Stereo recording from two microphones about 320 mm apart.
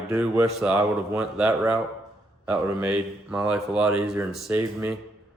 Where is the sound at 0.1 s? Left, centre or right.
Centre.